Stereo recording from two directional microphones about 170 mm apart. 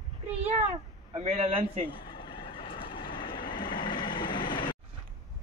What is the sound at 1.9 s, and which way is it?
Speech, 30° left (ahead or behind).